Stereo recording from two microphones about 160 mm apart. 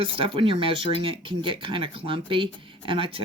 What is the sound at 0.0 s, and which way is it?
Speech, 35° right (ahead or behind).